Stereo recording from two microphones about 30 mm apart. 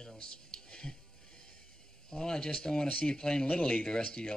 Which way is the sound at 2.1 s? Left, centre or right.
Left.